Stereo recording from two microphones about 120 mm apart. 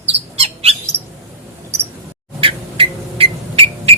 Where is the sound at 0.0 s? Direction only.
60° right (ahead or behind).